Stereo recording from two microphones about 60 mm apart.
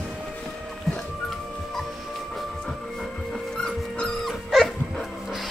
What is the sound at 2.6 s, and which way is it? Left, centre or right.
Dog, centre.